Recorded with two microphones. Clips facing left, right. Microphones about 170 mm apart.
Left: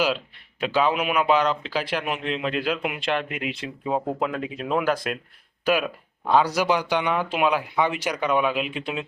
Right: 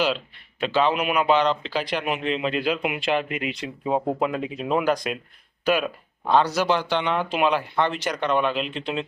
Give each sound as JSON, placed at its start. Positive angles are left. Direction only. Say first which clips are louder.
{"t": 0.6, "sound": "a man's voice", "louder": "right 1 dB", "side_deg": 5}